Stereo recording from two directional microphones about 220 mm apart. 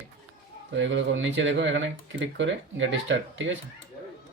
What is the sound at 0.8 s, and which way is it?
A man's voice, 55° right (ahead or behind).